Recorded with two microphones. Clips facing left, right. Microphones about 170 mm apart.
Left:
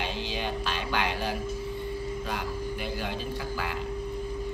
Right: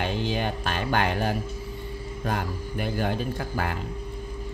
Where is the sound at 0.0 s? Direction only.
50° right (ahead or behind).